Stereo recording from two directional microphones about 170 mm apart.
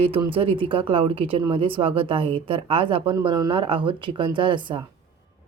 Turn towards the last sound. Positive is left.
turn(degrees=-30)  # may be behind; listen again after turning